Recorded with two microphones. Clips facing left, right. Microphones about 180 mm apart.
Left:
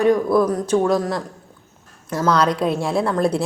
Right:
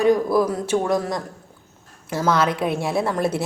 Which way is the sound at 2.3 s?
5° right (ahead or behind).